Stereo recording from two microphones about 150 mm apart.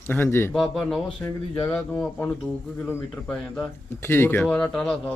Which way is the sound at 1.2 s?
15° left (ahead or behind).